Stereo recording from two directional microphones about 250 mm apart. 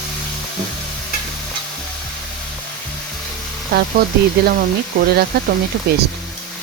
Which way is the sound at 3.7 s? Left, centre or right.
Right.